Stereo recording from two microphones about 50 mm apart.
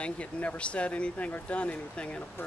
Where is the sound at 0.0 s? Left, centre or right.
Left.